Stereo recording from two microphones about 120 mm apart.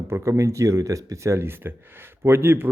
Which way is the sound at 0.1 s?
25° right (ahead or behind).